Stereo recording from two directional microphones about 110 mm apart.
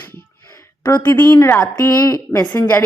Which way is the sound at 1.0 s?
15° left (ahead or behind).